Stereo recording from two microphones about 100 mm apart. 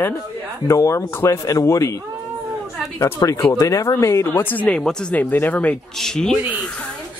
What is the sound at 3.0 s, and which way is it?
Speech, 30° left (ahead or behind).